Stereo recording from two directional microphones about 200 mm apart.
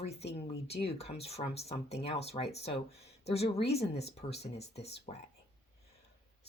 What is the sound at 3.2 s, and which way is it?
Speech, 30° left (ahead or behind).